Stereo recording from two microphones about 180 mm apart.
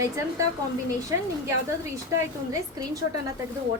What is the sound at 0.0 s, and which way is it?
Speech, 15° right (ahead or behind).